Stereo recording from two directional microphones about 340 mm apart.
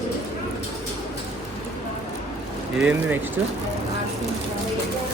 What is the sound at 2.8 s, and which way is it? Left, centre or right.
Speech, centre.